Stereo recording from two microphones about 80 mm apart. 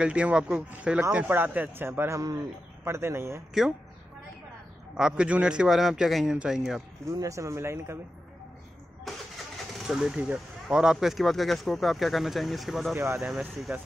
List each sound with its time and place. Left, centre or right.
0.0 s a man's voice: centre
1.9 s speech: right
4.9 s a man's voice: centre
7.1 s speech: right
9.1 s vehicle: centre
9.6 s speech: centre
13.7 s a man's voice: centre